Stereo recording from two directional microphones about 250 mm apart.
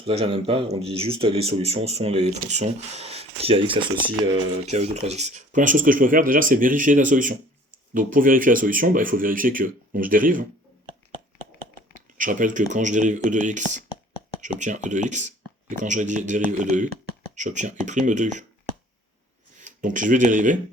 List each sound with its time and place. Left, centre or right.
0.0 s speech: right
4.6 s speech: right
11.9 s speech: right
19.5 s speech: right